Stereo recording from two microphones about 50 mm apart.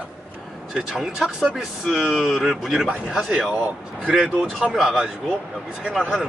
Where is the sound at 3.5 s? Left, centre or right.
Right.